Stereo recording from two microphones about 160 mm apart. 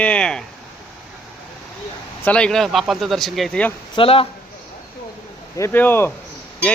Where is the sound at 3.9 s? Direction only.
35° left (ahead or behind).